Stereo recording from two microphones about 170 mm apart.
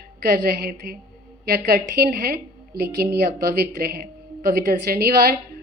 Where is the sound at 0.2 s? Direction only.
65° right (ahead or behind).